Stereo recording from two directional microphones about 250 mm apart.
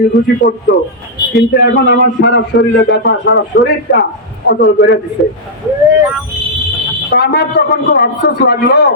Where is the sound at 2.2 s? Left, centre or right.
Left.